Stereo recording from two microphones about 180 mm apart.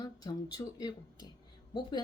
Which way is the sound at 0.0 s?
20° left (ahead or behind).